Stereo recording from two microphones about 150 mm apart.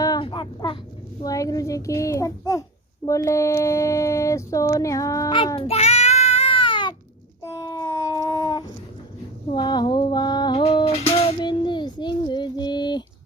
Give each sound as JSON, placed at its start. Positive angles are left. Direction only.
{"t": 0.0, "sound": "a sound", "side_deg": 30}
{"t": 1.2, "sound": "speech", "side_deg": 25}
{"t": 5.5, "sound": "child singing", "side_deg": 40}
{"t": 7.4, "sound": "child singing", "side_deg": 20}
{"t": 9.5, "sound": "a sound", "side_deg": 30}
{"t": 10.6, "sound": "child singing", "side_deg": 40}